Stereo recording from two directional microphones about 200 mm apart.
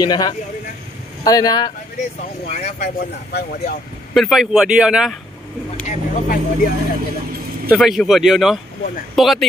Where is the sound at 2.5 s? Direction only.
35° left (ahead or behind).